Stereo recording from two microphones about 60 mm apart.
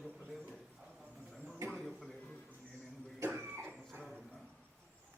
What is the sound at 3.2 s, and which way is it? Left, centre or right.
Cough, right.